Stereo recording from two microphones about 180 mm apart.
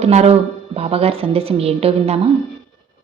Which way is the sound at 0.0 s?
35° right (ahead or behind).